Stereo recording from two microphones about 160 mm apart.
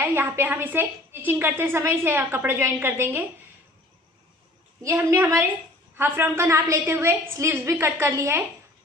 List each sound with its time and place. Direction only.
0.0 s a woman's voice: 15° right (ahead or behind)
4.8 s a woman's voice: 15° right (ahead or behind)